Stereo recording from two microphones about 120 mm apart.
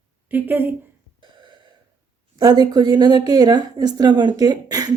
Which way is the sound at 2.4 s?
35° right (ahead or behind).